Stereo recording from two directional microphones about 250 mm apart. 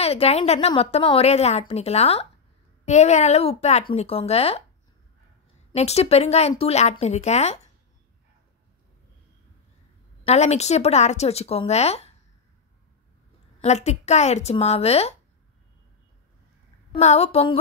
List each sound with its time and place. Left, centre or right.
0.0 s a woman's voice: left
5.7 s a woman's voice: left
10.2 s a woman's voice: left
13.6 s a woman's voice: left
16.9 s a woman's voice: left